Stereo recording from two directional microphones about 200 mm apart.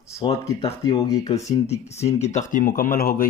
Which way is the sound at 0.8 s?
15° left (ahead or behind).